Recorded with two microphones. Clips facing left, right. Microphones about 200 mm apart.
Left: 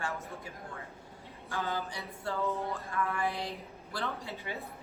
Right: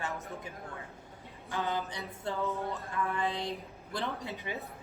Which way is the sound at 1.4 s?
15° right (ahead or behind).